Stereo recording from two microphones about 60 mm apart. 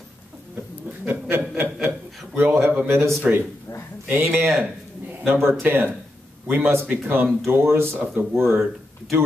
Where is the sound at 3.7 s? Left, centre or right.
Left.